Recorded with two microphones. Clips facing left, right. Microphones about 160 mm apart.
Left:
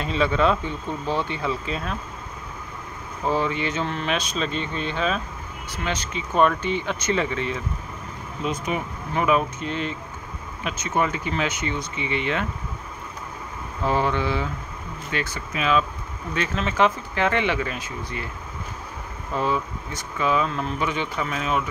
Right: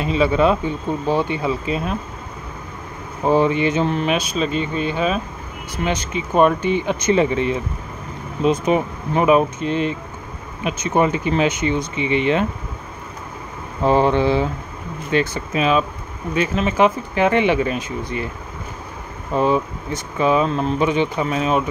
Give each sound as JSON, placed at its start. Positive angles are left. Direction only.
{"t": 0.0, "sound": "speech", "side_deg": -10}
{"t": 3.3, "sound": "speech", "side_deg": -20}
{"t": 13.8, "sound": "speech", "side_deg": -25}
{"t": 16.3, "sound": "speech", "side_deg": -10}
{"t": 19.3, "sound": "speech", "side_deg": -20}